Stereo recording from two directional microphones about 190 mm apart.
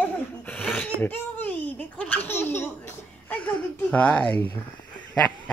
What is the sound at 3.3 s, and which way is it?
Speech, 5° left (ahead or behind).